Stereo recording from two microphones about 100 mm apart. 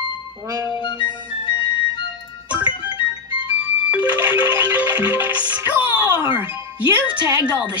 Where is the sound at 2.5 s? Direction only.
60° left (ahead or behind).